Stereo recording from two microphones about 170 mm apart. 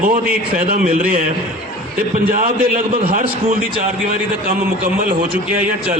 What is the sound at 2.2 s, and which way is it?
A man's voice, 50° right (ahead or behind).